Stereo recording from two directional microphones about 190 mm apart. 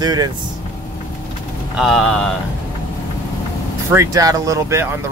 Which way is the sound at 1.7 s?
Centre (ahead or behind).